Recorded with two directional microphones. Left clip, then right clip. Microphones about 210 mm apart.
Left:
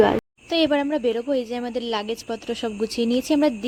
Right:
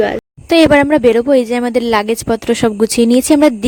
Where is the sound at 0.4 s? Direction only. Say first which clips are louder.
Right 13 dB; 50° right (ahead or behind).